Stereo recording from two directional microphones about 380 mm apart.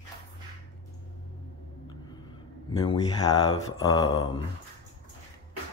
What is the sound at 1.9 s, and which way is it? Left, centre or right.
Speech, centre.